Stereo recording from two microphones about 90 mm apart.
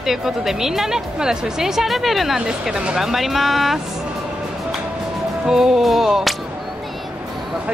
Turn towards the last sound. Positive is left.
turn(degrees=-5)  # may be behind; listen again after turning